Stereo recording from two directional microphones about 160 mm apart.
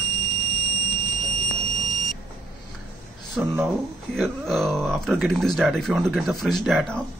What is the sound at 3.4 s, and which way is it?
A man's voice, 10° right (ahead or behind).